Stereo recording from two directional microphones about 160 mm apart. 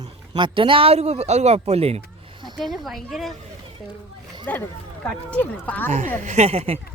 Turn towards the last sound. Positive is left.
turn(degrees=-40)  # may be behind; listen again after turning